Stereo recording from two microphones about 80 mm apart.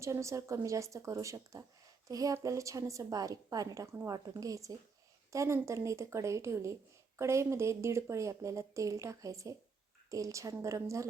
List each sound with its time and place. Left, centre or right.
0.0 s a woman's voice: right